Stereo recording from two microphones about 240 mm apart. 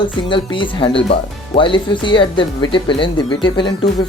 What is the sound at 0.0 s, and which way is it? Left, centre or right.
Speech, centre.